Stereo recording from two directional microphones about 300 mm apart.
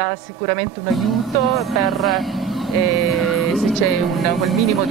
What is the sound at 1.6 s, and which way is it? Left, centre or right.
Speech, centre.